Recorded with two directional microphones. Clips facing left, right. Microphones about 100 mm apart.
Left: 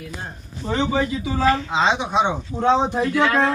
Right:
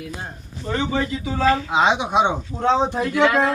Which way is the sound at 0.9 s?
15° left (ahead or behind).